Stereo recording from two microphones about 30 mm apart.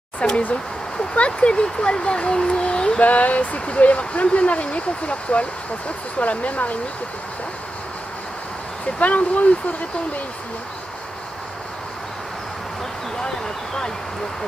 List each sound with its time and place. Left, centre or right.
0.2 s speech: left
1.5 s speech: left
2.6 s a sound: left
3.0 s speech: left
9.0 s speech: left